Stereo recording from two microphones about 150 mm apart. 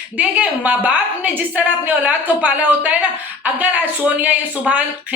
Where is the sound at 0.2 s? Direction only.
10° right (ahead or behind).